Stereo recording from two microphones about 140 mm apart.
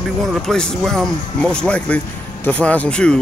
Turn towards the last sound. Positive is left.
turn(degrees=5)  # may be behind; listen again after turning